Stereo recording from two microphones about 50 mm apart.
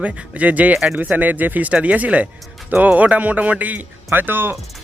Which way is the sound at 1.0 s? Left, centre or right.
Right.